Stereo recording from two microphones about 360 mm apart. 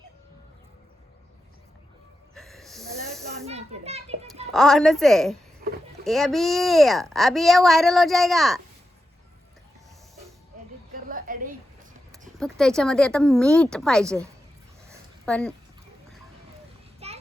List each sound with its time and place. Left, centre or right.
2.3 s snort: centre
3.4 s a child's voice: centre
4.5 s speech: centre
5.6 s a sound: right
6.1 s speech: centre
10.9 s a sound: right
12.4 s speech: centre
15.3 s speech: centre
17.0 s a sound: centre